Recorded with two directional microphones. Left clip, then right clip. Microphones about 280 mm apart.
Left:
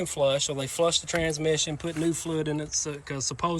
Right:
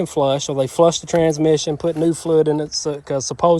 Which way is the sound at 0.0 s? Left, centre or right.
Right.